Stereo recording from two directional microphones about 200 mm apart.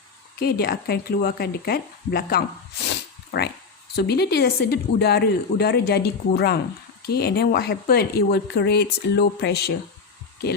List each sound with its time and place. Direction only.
0.3 s speech: 50° left (ahead or behind)
2.8 s a sound: 55° left (ahead or behind)
3.9 s speech: 55° left (ahead or behind)